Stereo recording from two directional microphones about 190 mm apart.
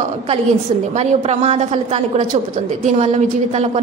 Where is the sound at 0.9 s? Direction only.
35° right (ahead or behind).